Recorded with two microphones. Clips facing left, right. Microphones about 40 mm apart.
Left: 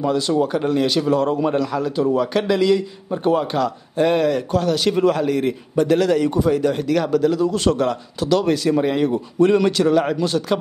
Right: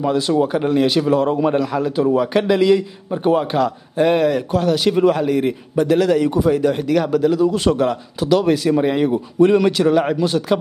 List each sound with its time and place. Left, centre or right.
0.0 s a man's voice: centre